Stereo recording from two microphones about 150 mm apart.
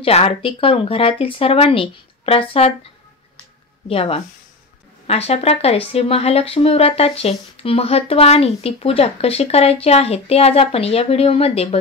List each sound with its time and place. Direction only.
0.0 s speech: 40° left (ahead or behind)
3.9 s speech: 40° left (ahead or behind)